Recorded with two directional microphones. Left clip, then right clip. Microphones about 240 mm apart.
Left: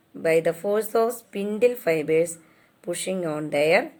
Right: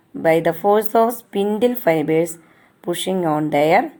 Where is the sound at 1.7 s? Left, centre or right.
Right.